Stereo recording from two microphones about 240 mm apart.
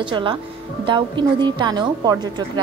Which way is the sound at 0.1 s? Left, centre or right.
Centre.